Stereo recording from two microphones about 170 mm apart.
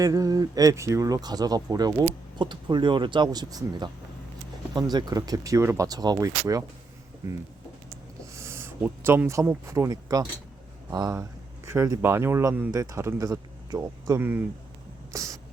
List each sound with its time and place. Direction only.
0.0 s speech: 20° right (ahead or behind)
8.3 s speech: 15° right (ahead or behind)
15.1 s a sound: 20° right (ahead or behind)